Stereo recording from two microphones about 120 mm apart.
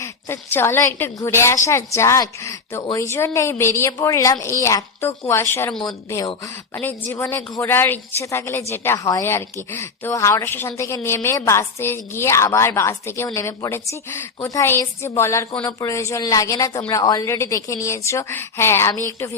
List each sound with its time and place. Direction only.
0.0 s a woman's voice: 20° left (ahead or behind)